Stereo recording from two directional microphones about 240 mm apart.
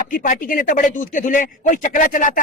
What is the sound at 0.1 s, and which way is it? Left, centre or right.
Speech, left.